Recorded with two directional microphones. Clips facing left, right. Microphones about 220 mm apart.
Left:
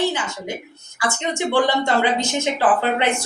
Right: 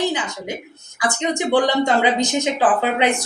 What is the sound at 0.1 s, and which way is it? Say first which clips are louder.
Speech: right 1 dB; 15° right (ahead or behind).